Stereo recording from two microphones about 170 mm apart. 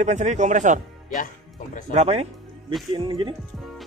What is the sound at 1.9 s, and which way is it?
Speech, 35° right (ahead or behind).